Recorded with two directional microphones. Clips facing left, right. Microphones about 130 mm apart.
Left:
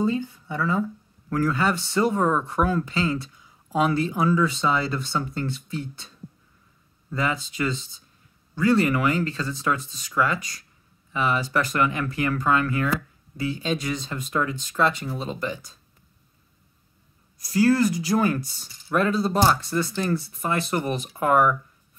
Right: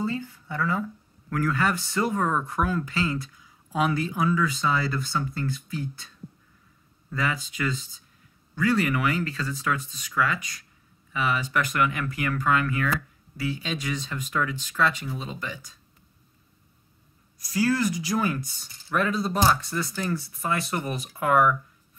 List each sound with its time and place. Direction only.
0.0 s speech: 20° left (ahead or behind); by 15.6 s 40° left (ahead or behind)
17.5 s speech: 35° left (ahead or behind)